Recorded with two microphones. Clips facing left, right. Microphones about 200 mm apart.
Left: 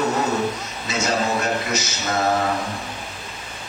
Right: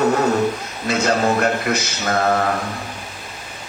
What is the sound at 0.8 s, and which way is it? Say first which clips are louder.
A man's voice: right 5 dB; 60° right (ahead or behind).